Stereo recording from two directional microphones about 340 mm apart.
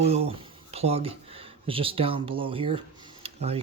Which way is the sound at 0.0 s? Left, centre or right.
Centre.